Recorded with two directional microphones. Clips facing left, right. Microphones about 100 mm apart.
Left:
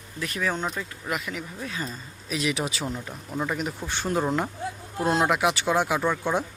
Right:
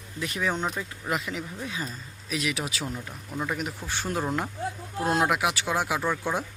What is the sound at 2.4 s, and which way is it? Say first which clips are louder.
Speech: left 3 dB; 30° left (ahead or behind).